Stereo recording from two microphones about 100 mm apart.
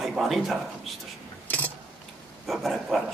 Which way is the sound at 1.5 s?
15° left (ahead or behind).